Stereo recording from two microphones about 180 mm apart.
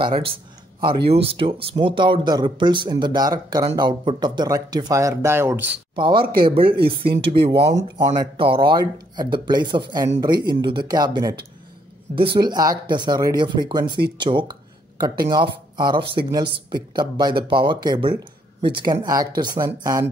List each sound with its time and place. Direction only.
0.0 s speech: 30° right (ahead or behind); by 5.8 s 10° right (ahead or behind)
5.9 s speech: 25° right (ahead or behind)
8.2 s speech: 25° right (ahead or behind)
12.4 s speech: 20° right (ahead or behind)